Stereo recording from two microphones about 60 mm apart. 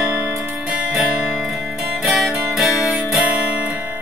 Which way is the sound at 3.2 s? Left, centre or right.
Right.